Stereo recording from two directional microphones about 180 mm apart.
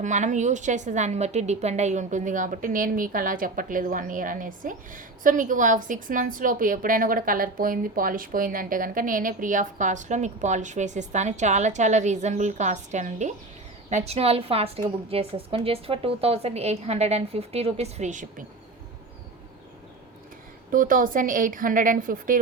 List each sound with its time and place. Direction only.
0.0 s a woman's voice: 40° right (ahead or behind)
20.7 s a woman's voice: 50° right (ahead or behind)